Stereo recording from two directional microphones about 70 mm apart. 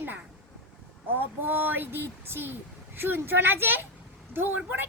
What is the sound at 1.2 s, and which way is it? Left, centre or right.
A child's voice, right.